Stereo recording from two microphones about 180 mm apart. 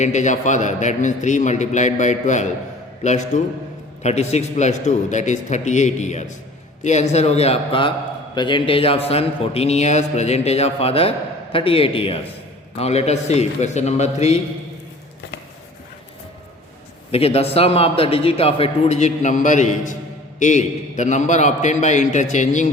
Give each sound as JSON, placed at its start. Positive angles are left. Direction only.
{"t": 0.0, "sound": "a man's voice", "side_deg": 40}
{"t": 17.1, "sound": "a man's voice", "side_deg": 35}